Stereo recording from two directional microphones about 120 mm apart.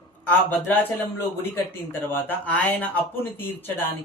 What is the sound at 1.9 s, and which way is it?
Speech, 15° left (ahead or behind).